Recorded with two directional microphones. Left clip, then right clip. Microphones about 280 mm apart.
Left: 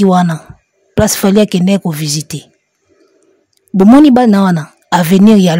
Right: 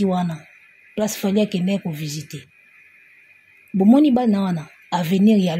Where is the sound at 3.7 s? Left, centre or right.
Left.